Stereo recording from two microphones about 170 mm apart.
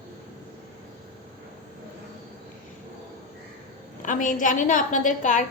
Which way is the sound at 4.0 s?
50° left (ahead or behind).